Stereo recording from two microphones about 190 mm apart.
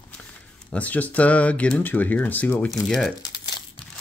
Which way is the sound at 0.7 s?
10° left (ahead or behind).